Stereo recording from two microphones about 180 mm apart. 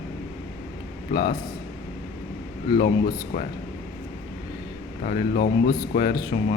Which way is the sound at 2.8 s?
50° left (ahead or behind).